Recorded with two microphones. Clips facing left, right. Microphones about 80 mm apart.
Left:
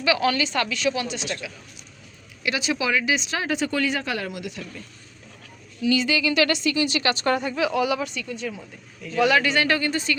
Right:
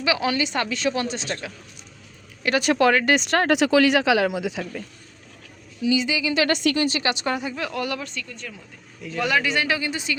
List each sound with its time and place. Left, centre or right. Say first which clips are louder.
0.0 s a woman's voice: left 1 dB; right
2.4 s speech: right 6 dB; right
5.8 s speech: left 1 dB; centre
6.5 s a woman's voice: right 2 dB; right
6.8 s a woman's voice: right 1 dB; right
7.1 s speech: left 2 dB; centre
7.3 s speech: left 5 dB; centre